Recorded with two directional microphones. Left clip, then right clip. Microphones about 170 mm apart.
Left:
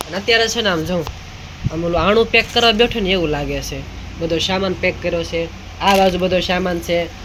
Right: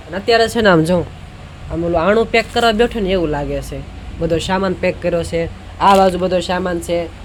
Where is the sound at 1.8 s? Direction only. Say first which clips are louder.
Right 1 dB; 5° right (ahead or behind).